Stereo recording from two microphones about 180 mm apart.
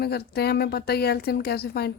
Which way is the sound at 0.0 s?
60° left (ahead or behind).